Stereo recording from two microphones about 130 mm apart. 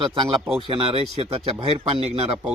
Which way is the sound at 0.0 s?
45° right (ahead or behind).